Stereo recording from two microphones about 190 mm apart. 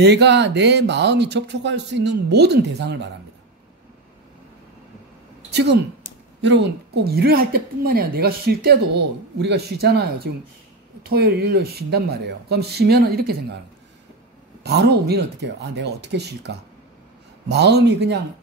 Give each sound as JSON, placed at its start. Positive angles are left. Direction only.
{"t": 0.0, "sound": "a woman's voice", "side_deg": -60}
{"t": 5.5, "sound": "a woman's voice", "side_deg": -60}
{"t": 14.6, "sound": "a woman's voice", "side_deg": -60}